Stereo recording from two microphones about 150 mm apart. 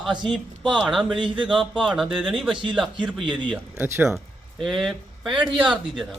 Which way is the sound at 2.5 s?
35° right (ahead or behind).